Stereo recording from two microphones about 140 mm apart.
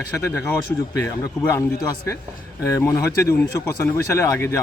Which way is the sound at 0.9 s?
20° left (ahead or behind).